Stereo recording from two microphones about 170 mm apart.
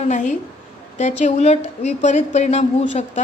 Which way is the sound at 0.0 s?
45° left (ahead or behind).